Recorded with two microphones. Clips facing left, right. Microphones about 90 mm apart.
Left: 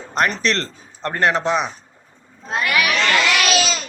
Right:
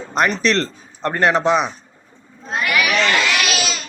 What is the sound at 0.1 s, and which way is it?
Speech, 10° right (ahead or behind).